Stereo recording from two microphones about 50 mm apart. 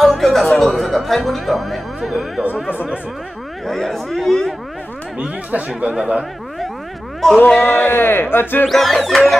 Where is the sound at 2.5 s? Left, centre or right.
Left.